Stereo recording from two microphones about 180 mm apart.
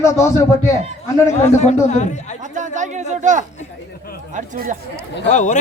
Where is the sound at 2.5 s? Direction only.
45° right (ahead or behind).